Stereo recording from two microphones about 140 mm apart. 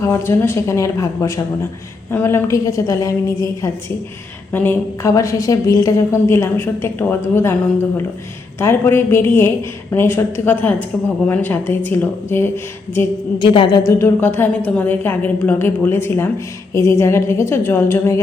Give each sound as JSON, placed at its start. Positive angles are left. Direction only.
{"t": 0.0, "sound": "a woman's voice", "side_deg": 20}
{"t": 8.5, "sound": "a woman's voice", "side_deg": 20}
{"t": 13.4, "sound": "a woman's voice", "side_deg": 35}